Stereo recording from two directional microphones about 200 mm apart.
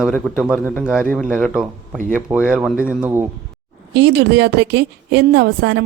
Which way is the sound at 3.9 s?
55° right (ahead or behind).